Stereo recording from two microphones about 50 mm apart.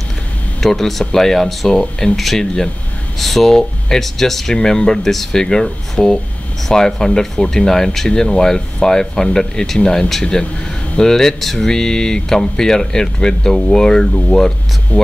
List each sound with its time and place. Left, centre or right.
0.6 s speech: centre
1.8 s speech: centre
2.1 s speech: centre